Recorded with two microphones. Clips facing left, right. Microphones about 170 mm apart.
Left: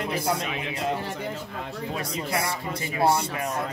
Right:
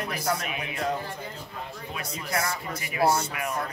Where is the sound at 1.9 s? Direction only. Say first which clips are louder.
Left 2 dB; 30° left (ahead or behind).